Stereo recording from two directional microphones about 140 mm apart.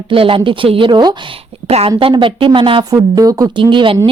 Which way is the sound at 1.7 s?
45° right (ahead or behind).